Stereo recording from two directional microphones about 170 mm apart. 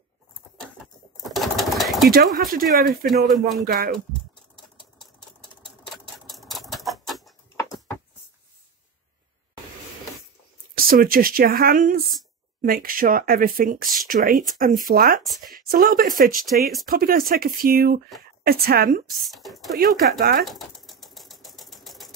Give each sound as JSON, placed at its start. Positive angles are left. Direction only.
{"t": 1.1, "sound": "sewing machine", "side_deg": 0}
{"t": 2.0, "sound": "speech", "side_deg": -60}
{"t": 3.3, "sound": "speech", "side_deg": 0}
{"t": 3.6, "sound": "speech", "side_deg": -60}
{"t": 6.2, "sound": "typewriter", "side_deg": 0}
{"t": 10.9, "sound": "speech", "side_deg": -60}
{"t": 15.2, "sound": "speech", "side_deg": 0}
{"t": 15.5, "sound": "speech", "side_deg": -60}
{"t": 19.3, "sound": "speech", "side_deg": 0}
{"t": 19.8, "sound": "speech", "side_deg": -60}
{"t": 20.4, "sound": "mechanisms", "side_deg": 0}